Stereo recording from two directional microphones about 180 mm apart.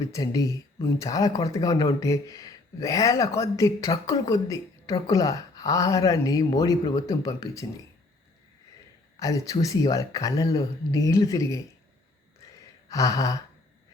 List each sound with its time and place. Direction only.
0.0 s speech: 20° left (ahead or behind)
9.1 s speech: 20° left (ahead or behind)
12.9 s speech: 20° left (ahead or behind)